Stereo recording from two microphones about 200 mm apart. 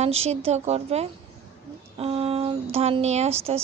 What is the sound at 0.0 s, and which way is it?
A woman's voice, 30° right (ahead or behind).